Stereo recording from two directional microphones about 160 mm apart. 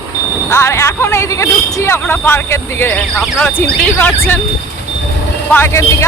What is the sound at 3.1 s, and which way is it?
Speech, centre (ahead or behind).